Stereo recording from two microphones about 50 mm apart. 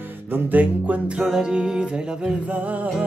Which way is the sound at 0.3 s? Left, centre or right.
Right.